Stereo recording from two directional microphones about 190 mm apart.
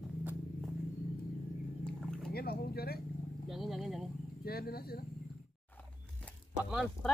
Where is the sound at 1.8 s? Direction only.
5° left (ahead or behind).